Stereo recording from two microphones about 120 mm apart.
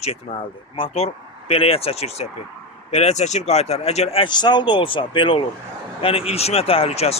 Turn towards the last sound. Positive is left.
turn(degrees=60)  # may be behind; listen again after turning